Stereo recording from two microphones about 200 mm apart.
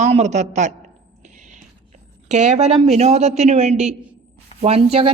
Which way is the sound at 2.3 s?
35° right (ahead or behind).